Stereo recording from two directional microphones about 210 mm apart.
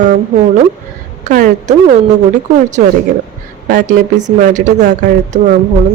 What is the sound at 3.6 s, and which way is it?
A woman's voice, 40° right (ahead or behind).